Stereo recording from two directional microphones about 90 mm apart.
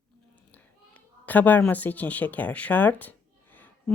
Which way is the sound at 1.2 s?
20° left (ahead or behind).